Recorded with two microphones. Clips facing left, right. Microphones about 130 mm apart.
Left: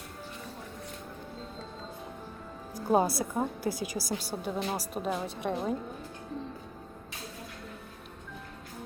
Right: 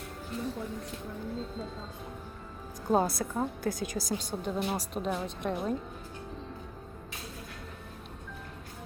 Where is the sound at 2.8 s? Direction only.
10° left (ahead or behind).